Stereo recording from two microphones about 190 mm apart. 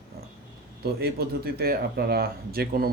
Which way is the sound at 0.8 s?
55° right (ahead or behind).